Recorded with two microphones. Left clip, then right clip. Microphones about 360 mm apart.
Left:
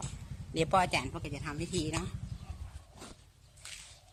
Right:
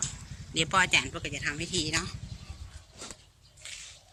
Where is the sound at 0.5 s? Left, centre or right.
Centre.